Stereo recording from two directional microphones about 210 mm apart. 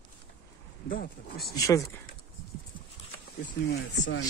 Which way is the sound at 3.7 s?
60° left (ahead or behind).